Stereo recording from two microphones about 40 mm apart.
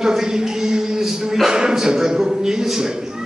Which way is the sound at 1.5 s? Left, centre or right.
Centre.